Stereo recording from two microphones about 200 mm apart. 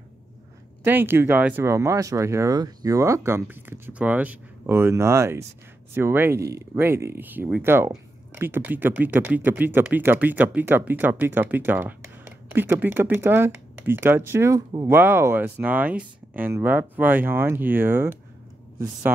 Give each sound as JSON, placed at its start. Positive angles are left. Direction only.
{"t": 0.8, "sound": "speech", "side_deg": -10}